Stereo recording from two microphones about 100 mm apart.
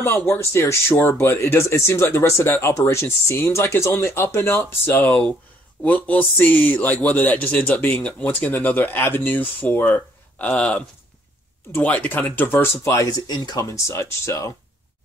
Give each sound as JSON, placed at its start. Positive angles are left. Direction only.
{"t": 0.0, "sound": "speech", "side_deg": 20}
{"t": 13.3, "sound": "speech", "side_deg": 45}
{"t": 13.7, "sound": "speech", "side_deg": 25}